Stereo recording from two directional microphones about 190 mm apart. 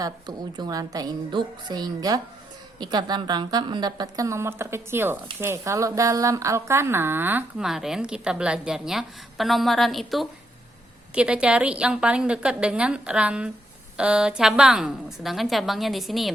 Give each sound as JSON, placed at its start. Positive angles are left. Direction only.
{"t": 0.0, "sound": "a woman's voice", "side_deg": -20}